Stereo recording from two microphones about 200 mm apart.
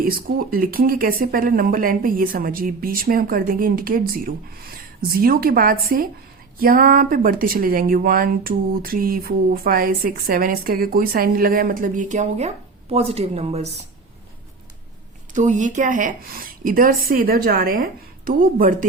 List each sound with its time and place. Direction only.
0.0 s a woman's voice: 45° right (ahead or behind)
15.3 s speech: 40° right (ahead or behind)